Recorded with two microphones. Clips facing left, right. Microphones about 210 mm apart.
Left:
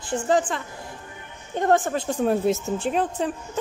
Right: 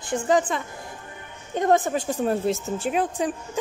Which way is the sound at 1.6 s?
15° right (ahead or behind).